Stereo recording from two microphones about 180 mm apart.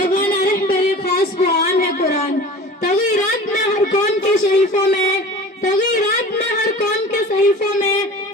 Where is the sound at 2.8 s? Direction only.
40° left (ahead or behind).